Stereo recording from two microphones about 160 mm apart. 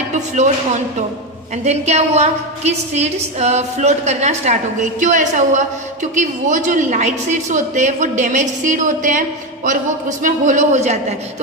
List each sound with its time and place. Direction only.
1.6 s a woman's voice: 40° right (ahead or behind)